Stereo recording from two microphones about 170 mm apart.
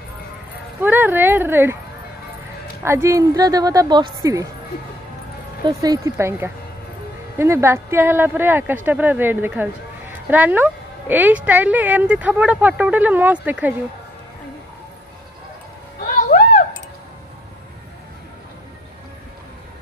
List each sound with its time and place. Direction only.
0.7 s speech: 10° right (ahead or behind)
2.8 s a woman's voice: 15° right (ahead or behind)
5.7 s speech: 20° right (ahead or behind)
16.0 s a sound: 55° left (ahead or behind)